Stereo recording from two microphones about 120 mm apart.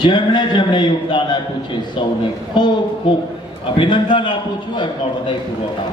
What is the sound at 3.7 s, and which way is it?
Speech, 40° left (ahead or behind).